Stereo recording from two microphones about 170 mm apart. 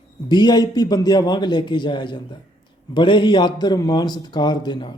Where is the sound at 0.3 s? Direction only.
25° left (ahead or behind).